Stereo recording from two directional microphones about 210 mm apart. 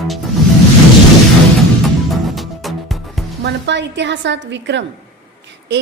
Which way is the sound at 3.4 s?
55° right (ahead or behind).